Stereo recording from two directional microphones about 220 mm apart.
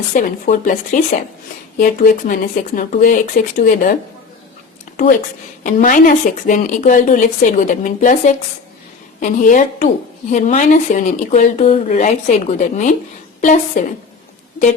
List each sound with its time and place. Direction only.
0.1 s a woman's voice: 35° left (ahead or behind)
5.6 s a woman's voice: 35° left (ahead or behind)